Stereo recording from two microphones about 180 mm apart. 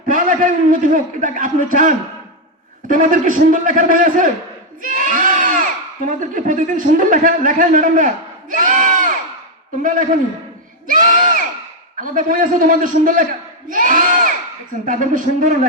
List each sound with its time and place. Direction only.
0.1 s a man's voice: 50° right (ahead or behind)
4.8 s crowd: 45° right (ahead or behind)
6.1 s a man's voice: 45° right (ahead or behind)
10.8 s crowd: 50° right (ahead or behind)
11.9 s a man's voice: 50° right (ahead or behind)
13.7 s crowd: 45° right (ahead or behind)
14.8 s a man's voice: 45° right (ahead or behind)